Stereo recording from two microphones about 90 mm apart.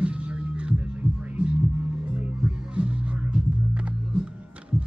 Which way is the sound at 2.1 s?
10° right (ahead or behind).